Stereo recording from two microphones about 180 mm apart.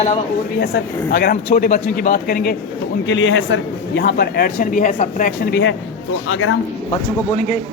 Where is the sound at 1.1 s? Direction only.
55° left (ahead or behind).